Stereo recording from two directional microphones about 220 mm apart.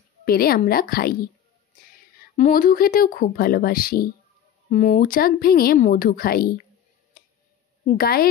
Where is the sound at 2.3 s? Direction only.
35° left (ahead or behind).